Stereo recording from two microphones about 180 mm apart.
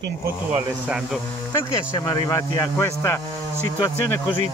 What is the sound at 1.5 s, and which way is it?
Speech, 20° left (ahead or behind).